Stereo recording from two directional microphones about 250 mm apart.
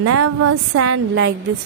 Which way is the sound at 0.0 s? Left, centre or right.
Right.